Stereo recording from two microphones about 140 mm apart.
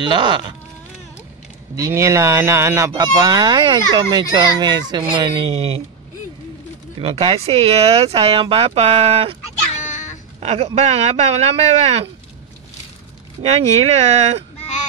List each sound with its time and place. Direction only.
0.0 s speech: 35° right (ahead or behind)
1.8 s speech: 20° right (ahead or behind)
2.9 s speech: 30° right (ahead or behind)
7.0 s speech: 40° right (ahead or behind)
9.8 s a sound: 60° left (ahead or behind)
10.4 s speech: 45° right (ahead or behind)
13.4 s speech: 50° right (ahead or behind)